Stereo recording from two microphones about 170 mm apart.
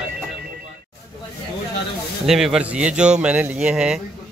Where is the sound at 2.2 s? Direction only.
5° right (ahead or behind).